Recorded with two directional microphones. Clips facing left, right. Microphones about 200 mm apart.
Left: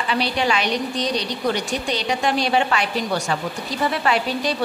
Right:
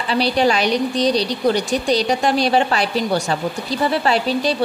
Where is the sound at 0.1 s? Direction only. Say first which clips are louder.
Right 5 dB; 35° right (ahead or behind).